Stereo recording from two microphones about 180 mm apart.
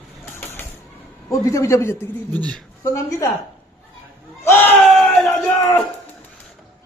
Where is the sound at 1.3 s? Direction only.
15° left (ahead or behind).